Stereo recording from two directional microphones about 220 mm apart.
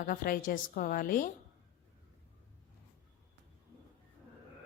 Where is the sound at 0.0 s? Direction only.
40° left (ahead or behind).